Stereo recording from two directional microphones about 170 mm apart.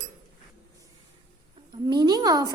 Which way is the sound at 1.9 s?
25° right (ahead or behind).